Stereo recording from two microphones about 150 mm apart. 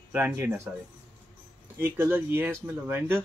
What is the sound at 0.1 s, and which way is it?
Speech, 15° right (ahead or behind).